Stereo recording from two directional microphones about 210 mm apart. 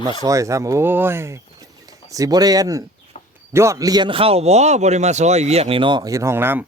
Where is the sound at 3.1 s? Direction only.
30° left (ahead or behind).